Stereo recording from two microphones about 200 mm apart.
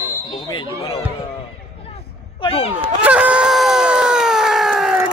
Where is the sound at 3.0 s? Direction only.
5° right (ahead or behind).